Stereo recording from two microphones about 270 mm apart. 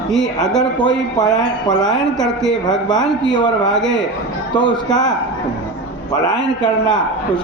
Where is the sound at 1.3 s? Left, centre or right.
Centre.